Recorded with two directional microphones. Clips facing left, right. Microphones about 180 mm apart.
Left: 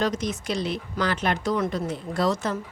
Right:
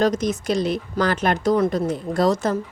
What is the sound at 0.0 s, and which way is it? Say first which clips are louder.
Speech: right 6 dB; 40° right (ahead or behind).